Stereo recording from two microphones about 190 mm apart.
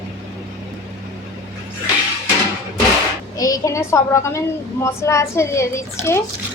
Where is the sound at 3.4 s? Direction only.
15° left (ahead or behind).